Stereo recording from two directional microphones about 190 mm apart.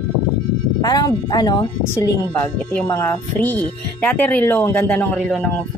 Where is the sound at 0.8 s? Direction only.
20° left (ahead or behind).